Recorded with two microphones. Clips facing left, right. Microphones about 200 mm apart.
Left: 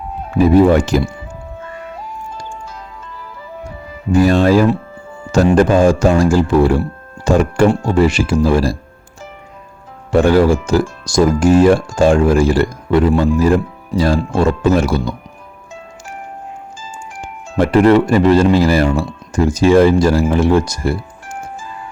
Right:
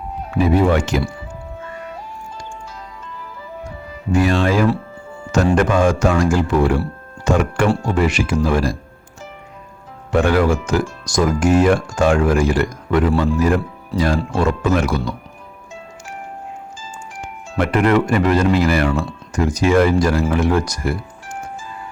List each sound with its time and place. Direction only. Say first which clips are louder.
0.3 s speech: left 6 dB; 40° left (ahead or behind)
4.1 s speech: left 5 dB; 35° left (ahead or behind)
10.1 s speech: left 5 dB; 30° left (ahead or behind)
17.2 s speech: left 5 dB; 30° left (ahead or behind)